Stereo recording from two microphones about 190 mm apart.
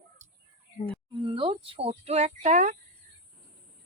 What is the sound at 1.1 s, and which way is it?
Speech, 25° right (ahead or behind).